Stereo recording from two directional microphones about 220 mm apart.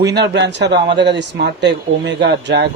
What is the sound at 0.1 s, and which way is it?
Speech, 50° right (ahead or behind).